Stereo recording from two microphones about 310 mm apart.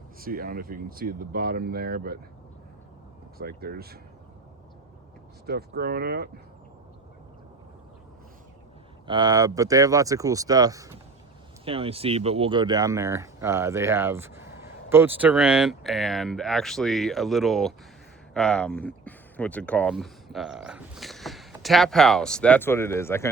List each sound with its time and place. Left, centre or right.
0.2 s speech: right
3.3 s speech: right
5.5 s speech: right
9.0 s speech: centre